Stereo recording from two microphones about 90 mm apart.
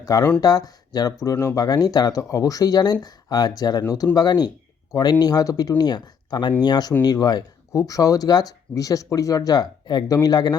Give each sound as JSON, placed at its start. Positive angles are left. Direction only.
{"t": 0.0, "sound": "speech", "side_deg": 40}
{"t": 7.7, "sound": "speech", "side_deg": 35}